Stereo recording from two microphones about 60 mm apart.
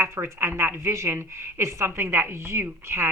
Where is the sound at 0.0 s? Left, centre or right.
Right.